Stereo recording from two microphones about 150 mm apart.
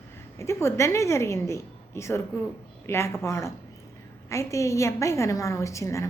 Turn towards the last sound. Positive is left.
turn(degrees=20)  # may be behind; listen again after turning